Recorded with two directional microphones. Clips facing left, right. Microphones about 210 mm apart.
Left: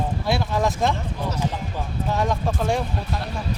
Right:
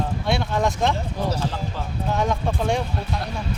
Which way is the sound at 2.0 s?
Centre (ahead or behind).